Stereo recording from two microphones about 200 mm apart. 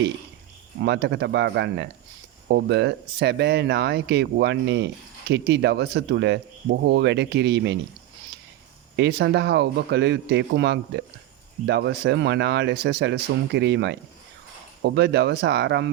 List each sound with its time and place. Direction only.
0.8 s speech: 55° right (ahead or behind)
9.0 s speech: 55° right (ahead or behind)